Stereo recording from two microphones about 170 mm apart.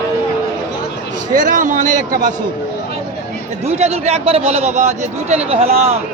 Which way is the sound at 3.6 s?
40° right (ahead or behind).